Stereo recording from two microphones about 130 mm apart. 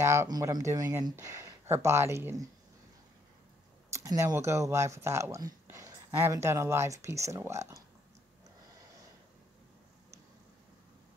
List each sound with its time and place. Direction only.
0.0 s speech: 20° right (ahead or behind)
3.9 s speech: 25° right (ahead or behind)